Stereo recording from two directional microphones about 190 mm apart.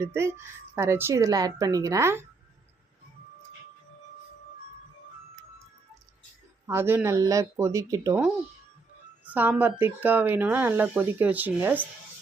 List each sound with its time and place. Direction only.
0.0 s speech: 15° right (ahead or behind)
6.7 s speech: 10° right (ahead or behind)
9.2 s speech: 10° right (ahead or behind)